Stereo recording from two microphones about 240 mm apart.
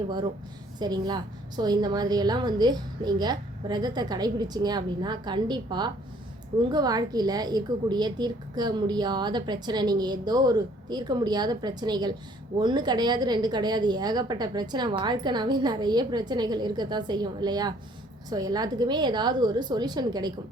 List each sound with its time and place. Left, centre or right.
0.8 s a woman's voice: centre